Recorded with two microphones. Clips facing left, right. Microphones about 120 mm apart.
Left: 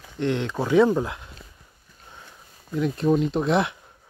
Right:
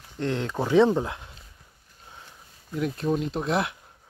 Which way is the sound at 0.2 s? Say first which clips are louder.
Left 3 dB; 40° right (ahead or behind).